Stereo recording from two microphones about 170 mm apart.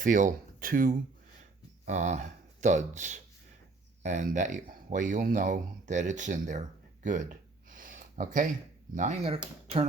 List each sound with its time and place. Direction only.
0.0 s speech: 50° right (ahead or behind)